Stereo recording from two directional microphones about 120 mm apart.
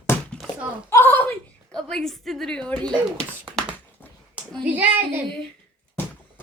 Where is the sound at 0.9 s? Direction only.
15° left (ahead or behind).